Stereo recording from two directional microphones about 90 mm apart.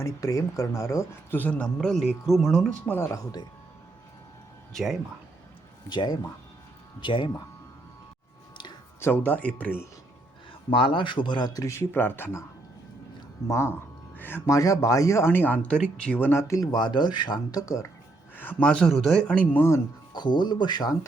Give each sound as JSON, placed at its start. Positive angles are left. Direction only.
{"t": 0.0, "sound": "speech", "side_deg": 35}
{"t": 1.3, "sound": "speech", "side_deg": 20}
{"t": 2.8, "sound": "speech", "side_deg": 25}
{"t": 4.7, "sound": "speech", "side_deg": 0}
{"t": 5.9, "sound": "speech", "side_deg": 55}
{"t": 9.0, "sound": "speech", "side_deg": 25}
{"t": 10.7, "sound": "speech", "side_deg": 85}
{"t": 13.5, "sound": "speech", "side_deg": 30}
{"t": 14.5, "sound": "speech", "side_deg": 40}
{"t": 16.4, "sound": "speech", "side_deg": 40}
{"t": 18.3, "sound": "speech", "side_deg": 20}
{"t": 18.7, "sound": "speech", "side_deg": 5}
{"t": 20.1, "sound": "speech", "side_deg": 55}